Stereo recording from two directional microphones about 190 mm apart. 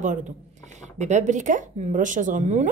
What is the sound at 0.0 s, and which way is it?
Dishes, 40° right (ahead or behind).